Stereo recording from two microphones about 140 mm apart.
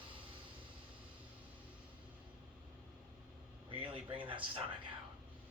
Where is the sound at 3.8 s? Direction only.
35° right (ahead or behind).